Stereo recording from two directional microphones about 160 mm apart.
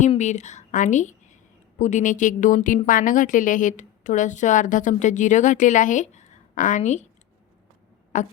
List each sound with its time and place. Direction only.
0.2 s a woman's voice: 45° left (ahead or behind)
2.8 s a woman's voice: 60° left (ahead or behind)
8.1 s a woman's voice: 50° left (ahead or behind)